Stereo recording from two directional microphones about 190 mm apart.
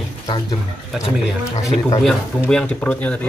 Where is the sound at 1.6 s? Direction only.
15° left (ahead or behind).